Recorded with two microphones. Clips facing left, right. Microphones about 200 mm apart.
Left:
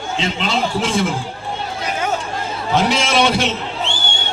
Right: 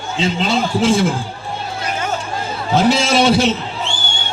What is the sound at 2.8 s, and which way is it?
Speech, centre (ahead or behind).